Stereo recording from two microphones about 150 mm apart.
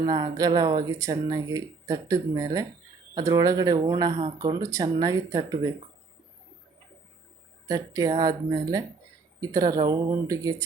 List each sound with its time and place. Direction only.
0.0 s speech: 25° right (ahead or behind)
7.7 s speech: 25° right (ahead or behind)